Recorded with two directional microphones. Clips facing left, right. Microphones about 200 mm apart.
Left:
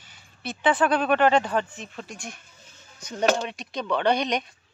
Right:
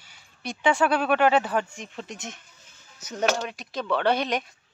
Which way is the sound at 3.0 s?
5° right (ahead or behind).